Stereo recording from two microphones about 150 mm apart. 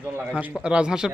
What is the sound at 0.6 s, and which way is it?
Speech, 5° right (ahead or behind).